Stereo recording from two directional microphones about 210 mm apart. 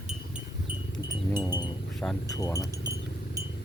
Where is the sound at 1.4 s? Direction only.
20° left (ahead or behind).